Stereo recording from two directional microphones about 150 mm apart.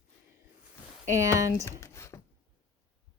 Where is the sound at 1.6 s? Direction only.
15° left (ahead or behind).